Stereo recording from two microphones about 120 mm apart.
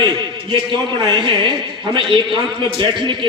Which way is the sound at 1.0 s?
40° right (ahead or behind).